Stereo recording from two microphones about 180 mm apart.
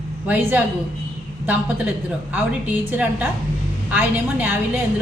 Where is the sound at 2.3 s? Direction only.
10° right (ahead or behind).